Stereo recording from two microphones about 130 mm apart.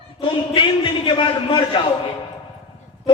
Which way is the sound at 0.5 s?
40° left (ahead or behind).